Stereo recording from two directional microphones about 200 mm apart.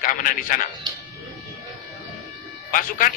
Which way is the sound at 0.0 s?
45° left (ahead or behind).